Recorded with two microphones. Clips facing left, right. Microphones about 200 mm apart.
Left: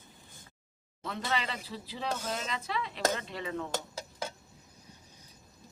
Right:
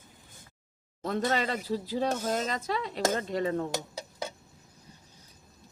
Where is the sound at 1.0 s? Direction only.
45° right (ahead or behind).